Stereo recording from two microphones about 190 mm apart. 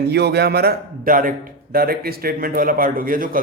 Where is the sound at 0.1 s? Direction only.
60° right (ahead or behind).